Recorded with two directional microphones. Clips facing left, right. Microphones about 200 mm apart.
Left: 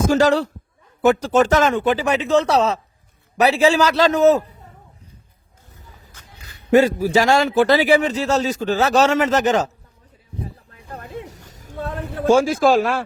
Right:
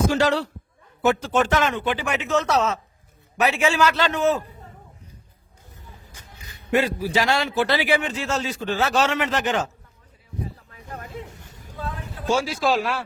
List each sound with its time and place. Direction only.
0.1 s a man's voice: 45° left (ahead or behind)
6.7 s a man's voice: 45° left (ahead or behind)
10.8 s a sound: 35° left (ahead or behind); by 13.0 s 50° left (ahead or behind)